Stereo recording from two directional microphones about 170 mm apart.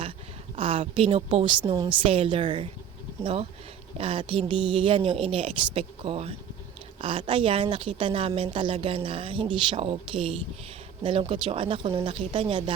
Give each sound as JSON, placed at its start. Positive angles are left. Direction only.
{"t": 0.5, "sound": "a woman's voice", "side_deg": -30}
{"t": 3.9, "sound": "a woman's voice", "side_deg": -30}